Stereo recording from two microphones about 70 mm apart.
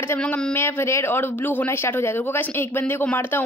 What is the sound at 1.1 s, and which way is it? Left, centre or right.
A woman's voice, left.